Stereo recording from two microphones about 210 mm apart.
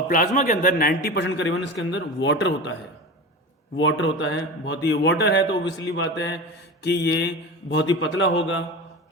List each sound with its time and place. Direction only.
0.1 s a man's voice: 40° left (ahead or behind); by 2.7 s 60° left (ahead or behind)
3.8 s a man's voice: 60° left (ahead or behind)